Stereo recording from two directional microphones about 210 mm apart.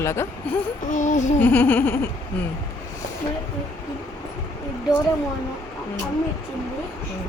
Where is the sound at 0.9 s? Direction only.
35° left (ahead or behind).